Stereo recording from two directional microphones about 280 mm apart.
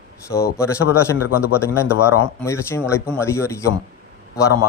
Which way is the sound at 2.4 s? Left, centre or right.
Centre.